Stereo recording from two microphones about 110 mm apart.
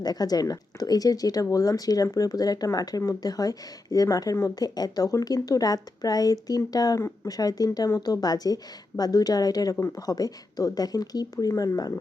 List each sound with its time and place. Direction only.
0.0 s speech: 35° left (ahead or behind)